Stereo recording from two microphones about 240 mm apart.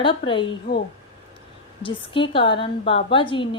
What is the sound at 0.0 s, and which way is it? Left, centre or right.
A woman's voice, left.